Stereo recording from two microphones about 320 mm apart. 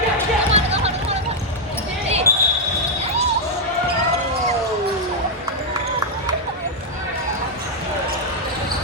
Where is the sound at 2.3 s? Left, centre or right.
Centre.